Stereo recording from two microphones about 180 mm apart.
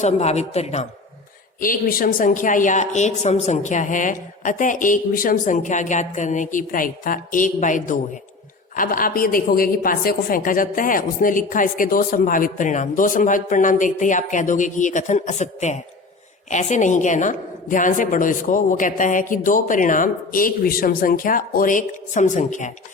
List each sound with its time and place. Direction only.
0.0 s speech: 40° left (ahead or behind)
1.6 s a woman's voice: 50° left (ahead or behind)